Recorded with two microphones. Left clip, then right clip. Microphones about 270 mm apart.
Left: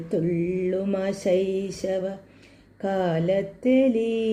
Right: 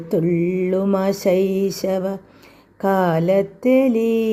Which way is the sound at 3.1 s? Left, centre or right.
Right.